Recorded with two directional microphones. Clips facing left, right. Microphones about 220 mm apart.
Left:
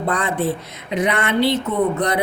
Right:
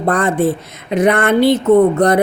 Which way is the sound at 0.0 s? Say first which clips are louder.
Right 6 dB; 50° right (ahead or behind).